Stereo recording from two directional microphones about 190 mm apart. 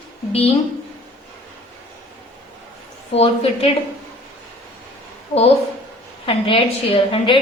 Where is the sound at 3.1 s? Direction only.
35° left (ahead or behind).